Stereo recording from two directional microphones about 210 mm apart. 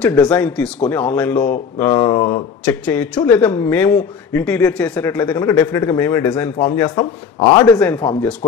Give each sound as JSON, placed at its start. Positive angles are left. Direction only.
{"t": 0.0, "sound": "speech", "side_deg": 5}
{"t": 1.8, "sound": "speech", "side_deg": 20}
{"t": 2.6, "sound": "speech", "side_deg": 5}
{"t": 7.6, "sound": "speech", "side_deg": 5}